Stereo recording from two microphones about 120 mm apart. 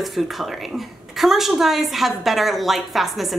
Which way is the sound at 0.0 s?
Centre (ahead or behind).